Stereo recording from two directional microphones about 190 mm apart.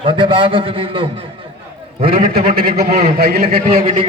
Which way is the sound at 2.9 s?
35° right (ahead or behind).